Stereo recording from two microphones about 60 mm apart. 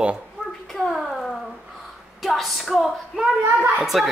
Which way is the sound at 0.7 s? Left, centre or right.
Centre.